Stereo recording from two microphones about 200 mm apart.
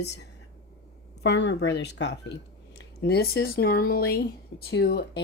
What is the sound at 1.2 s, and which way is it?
Speech, 60° left (ahead or behind).